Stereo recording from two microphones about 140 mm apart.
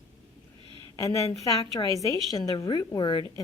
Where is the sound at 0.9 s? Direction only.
25° left (ahead or behind).